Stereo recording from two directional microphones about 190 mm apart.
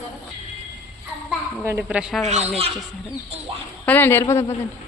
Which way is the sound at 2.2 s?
35° right (ahead or behind).